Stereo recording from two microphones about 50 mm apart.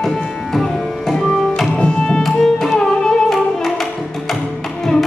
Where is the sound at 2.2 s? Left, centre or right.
Centre.